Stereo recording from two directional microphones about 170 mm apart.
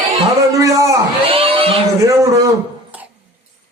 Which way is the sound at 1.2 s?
35° right (ahead or behind).